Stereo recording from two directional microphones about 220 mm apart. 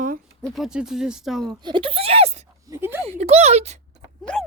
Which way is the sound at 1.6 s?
20° right (ahead or behind).